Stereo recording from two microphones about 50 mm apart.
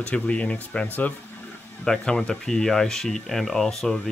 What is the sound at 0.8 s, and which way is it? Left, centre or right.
Speech, left.